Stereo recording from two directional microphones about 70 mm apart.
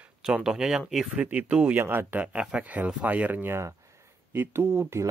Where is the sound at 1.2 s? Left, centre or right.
Centre.